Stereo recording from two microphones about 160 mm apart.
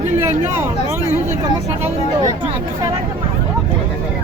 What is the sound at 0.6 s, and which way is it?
Speech, 15° right (ahead or behind).